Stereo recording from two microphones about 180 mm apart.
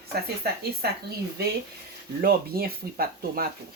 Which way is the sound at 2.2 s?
55° right (ahead or behind).